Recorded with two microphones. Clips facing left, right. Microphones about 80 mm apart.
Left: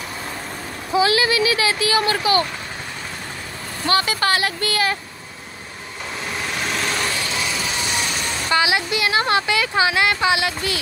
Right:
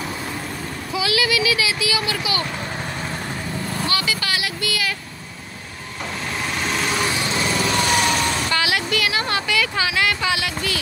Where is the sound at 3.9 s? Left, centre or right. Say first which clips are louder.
Left 8 dB; left.